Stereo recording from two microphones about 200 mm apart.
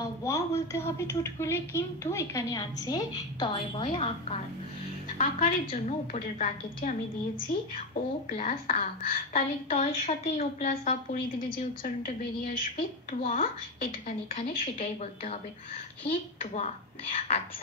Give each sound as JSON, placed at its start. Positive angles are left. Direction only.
{"t": 0.2, "sound": "a woman's voice", "side_deg": 15}
{"t": 5.1, "sound": "a woman's voice", "side_deg": 40}
{"t": 9.7, "sound": "a woman's voice", "side_deg": 30}
{"t": 11.5, "sound": "a woman's voice", "side_deg": 45}
{"t": 16.1, "sound": "a woman's voice", "side_deg": 30}